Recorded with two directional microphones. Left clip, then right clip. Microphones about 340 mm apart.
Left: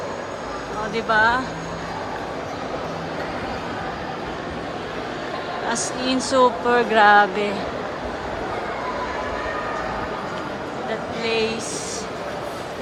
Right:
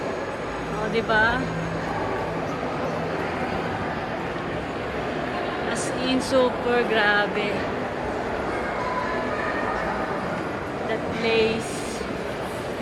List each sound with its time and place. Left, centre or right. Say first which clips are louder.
0.9 s speech: left 3 dB; centre
6.3 s speech: left 5 dB; centre
11.3 s speech: right 1 dB; centre